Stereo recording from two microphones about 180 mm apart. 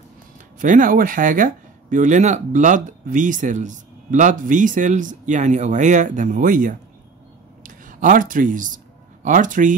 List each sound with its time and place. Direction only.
0.6 s speech: 45° right (ahead or behind)